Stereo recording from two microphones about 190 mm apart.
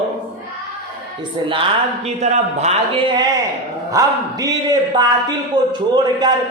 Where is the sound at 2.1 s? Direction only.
35° right (ahead or behind).